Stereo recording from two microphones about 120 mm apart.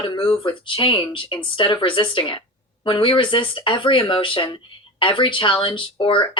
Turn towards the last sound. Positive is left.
turn(degrees=45)  # may be behind; listen again after turning